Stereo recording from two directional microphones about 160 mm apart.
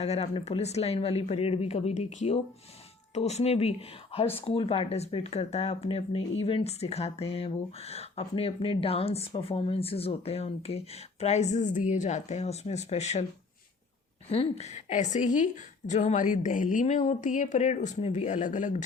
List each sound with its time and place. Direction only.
0.0 s speech: 40° left (ahead or behind)
14.3 s a woman's voice: 40° left (ahead or behind)